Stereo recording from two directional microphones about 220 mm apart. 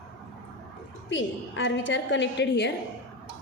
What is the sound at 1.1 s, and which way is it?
A woman's voice, 55° left (ahead or behind).